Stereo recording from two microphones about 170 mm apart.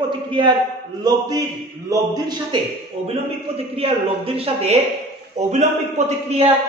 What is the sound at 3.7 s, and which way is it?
A woman's voice, 35° right (ahead or behind).